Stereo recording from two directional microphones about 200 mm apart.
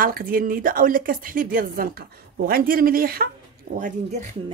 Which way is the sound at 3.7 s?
35° right (ahead or behind).